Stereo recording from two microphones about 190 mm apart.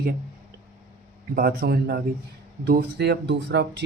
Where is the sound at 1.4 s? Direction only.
55° right (ahead or behind).